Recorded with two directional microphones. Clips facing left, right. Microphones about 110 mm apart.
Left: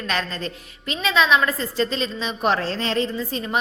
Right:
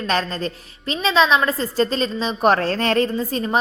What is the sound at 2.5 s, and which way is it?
Speech, 55° right (ahead or behind).